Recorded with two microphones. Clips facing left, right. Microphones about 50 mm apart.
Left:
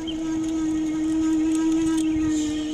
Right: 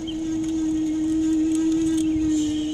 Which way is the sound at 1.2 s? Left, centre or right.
Left.